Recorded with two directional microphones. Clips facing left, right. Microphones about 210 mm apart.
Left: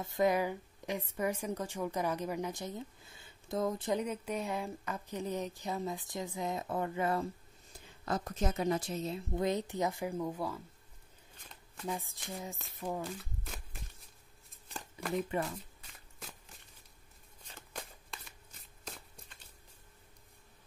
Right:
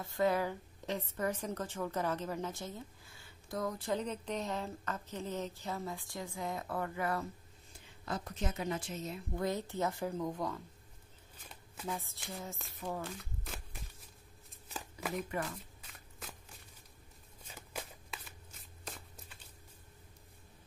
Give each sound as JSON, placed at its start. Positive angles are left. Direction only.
{"t": 0.0, "sound": "a woman's voice", "side_deg": 20}
{"t": 4.0, "sound": "a woman's voice", "side_deg": 10}
{"t": 8.0, "sound": "a woman's voice", "side_deg": 45}
{"t": 11.3, "sound": "shuffling cards", "side_deg": -5}
{"t": 11.9, "sound": "a woman's voice", "side_deg": 15}
{"t": 12.5, "sound": "speech", "side_deg": 0}
{"t": 13.0, "sound": "crumpling", "side_deg": 0}
{"t": 14.5, "sound": "shuffling cards", "side_deg": -5}
{"t": 17.4, "sound": "shuffling cards", "side_deg": -5}